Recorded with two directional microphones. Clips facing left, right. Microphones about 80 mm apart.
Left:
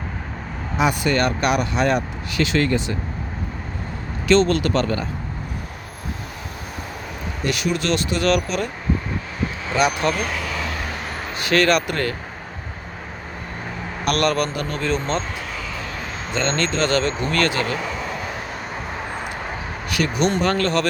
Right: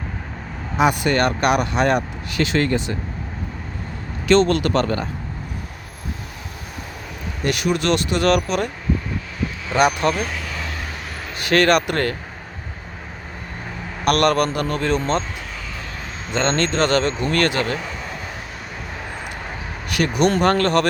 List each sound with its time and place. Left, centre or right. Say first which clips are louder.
0.8 s speech: right 2 dB; right
4.3 s speech: right 1 dB; right
7.4 s speech: right 2 dB; right
9.7 s speech: right 2 dB; right
10.2 s a sound: left 3 dB; left
10.9 s a sound: left 3 dB; left
11.4 s speech: right 2 dB; right
14.0 s a man's voice: right 3 dB; right
16.3 s speech: right 2 dB; right
17.7 s a sound: left 3 dB; left
18.7 s vehicle: left 2 dB; left
20.0 s speech: right 3 dB; right